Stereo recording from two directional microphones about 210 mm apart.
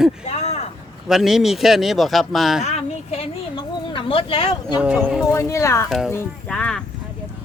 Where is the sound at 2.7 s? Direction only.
30° left (ahead or behind).